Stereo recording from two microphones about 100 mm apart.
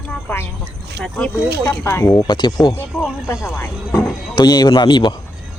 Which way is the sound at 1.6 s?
25° left (ahead or behind).